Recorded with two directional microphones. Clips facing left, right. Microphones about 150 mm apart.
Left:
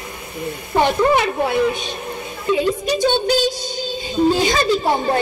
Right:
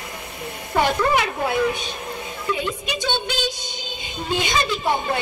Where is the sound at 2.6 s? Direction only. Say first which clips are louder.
Left 9 dB; 40° left (ahead or behind).